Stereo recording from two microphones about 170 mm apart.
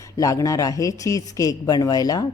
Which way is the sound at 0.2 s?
20° left (ahead or behind).